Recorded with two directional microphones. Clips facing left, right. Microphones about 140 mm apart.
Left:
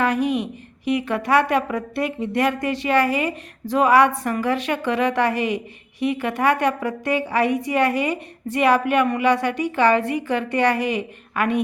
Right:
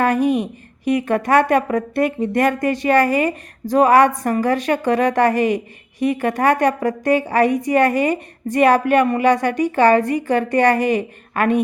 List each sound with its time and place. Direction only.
0.0 s a woman's voice: 45° right (ahead or behind)